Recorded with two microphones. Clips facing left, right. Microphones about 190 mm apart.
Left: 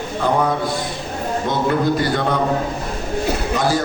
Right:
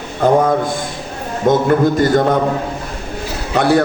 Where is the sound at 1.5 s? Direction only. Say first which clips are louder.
Right 7 dB; 50° right (ahead or behind).